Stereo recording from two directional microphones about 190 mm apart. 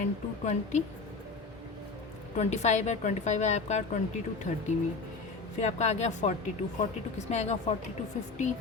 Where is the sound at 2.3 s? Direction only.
35° left (ahead or behind).